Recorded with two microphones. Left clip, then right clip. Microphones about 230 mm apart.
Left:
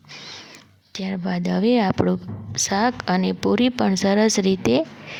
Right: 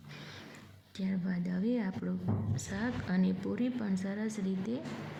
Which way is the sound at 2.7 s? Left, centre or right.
Left.